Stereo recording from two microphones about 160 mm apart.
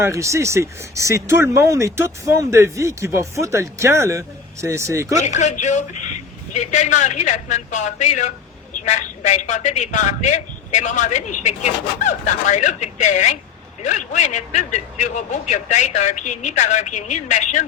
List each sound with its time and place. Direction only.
0.0 s speech: 20° right (ahead or behind)
5.2 s a woman's voice: 45° left (ahead or behind)